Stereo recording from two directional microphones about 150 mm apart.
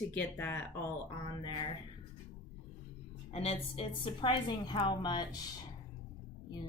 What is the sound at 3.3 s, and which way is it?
A woman's voice, 45° left (ahead or behind).